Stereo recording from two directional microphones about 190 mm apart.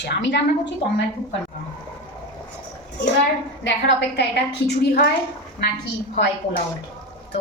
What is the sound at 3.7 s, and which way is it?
A woman's voice, 65° left (ahead or behind).